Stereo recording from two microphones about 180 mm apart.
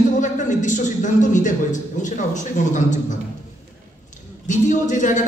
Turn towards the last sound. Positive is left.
turn(degrees=45)  # may be behind; listen again after turning